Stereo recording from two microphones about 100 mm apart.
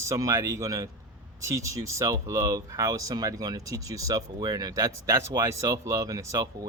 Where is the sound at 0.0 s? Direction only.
35° right (ahead or behind).